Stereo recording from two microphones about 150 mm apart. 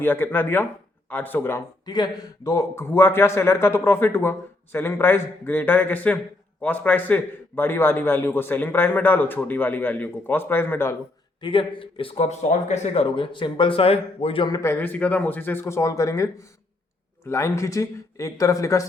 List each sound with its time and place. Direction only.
0.0 s a man's voice: 15° left (ahead or behind)
1.8 s a man's voice: 25° left (ahead or behind)
11.3 s a man's voice: 35° left (ahead or behind)
14.4 s a man's voice: 20° left (ahead or behind)